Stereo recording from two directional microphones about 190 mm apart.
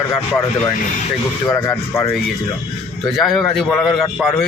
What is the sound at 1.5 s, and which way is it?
Speech, 15° left (ahead or behind).